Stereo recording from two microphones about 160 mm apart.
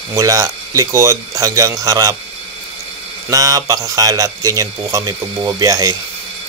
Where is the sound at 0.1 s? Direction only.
20° right (ahead or behind).